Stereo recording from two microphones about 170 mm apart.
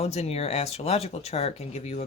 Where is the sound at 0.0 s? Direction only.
40° left (ahead or behind).